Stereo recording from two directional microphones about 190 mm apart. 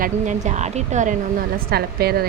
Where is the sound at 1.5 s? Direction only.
55° right (ahead or behind).